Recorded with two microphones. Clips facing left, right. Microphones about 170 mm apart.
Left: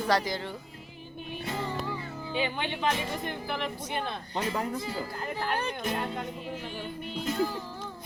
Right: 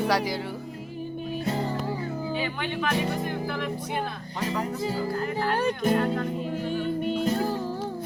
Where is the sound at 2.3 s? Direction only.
20° left (ahead or behind).